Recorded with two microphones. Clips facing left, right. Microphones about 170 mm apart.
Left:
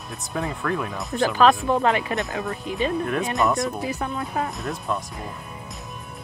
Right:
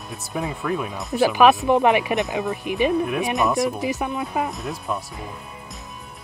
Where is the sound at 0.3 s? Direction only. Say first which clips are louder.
Right 1 dB; 15° right (ahead or behind).